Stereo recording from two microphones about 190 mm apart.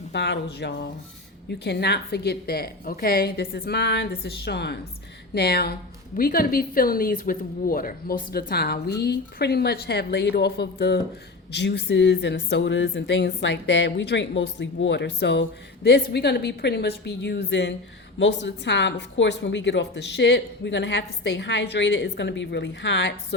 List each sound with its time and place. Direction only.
0.1 s a woman's voice: 65° left (ahead or behind)